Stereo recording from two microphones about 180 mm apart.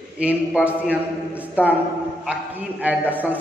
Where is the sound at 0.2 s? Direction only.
5° right (ahead or behind).